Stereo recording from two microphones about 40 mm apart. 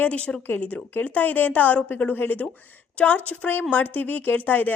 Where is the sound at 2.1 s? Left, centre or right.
Left.